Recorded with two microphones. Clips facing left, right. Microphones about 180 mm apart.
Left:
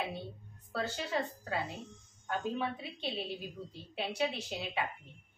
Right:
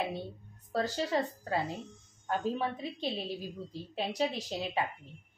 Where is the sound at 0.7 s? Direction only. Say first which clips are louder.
Right 5 dB; 35° right (ahead or behind).